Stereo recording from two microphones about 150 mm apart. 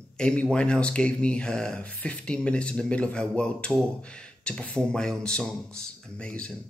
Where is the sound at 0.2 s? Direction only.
5° left (ahead or behind).